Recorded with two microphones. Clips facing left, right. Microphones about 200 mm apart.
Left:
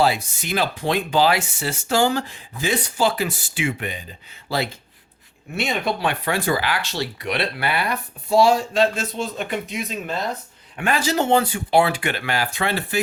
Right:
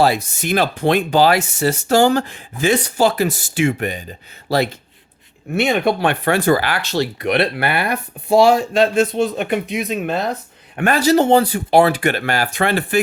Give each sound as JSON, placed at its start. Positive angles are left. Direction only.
{"t": 0.0, "sound": "speech", "side_deg": -45}
{"t": 2.0, "sound": "speech", "side_deg": -55}
{"t": 5.5, "sound": "speech", "side_deg": -60}
{"t": 6.4, "sound": "speech", "side_deg": -45}
{"t": 10.9, "sound": "speech", "side_deg": -40}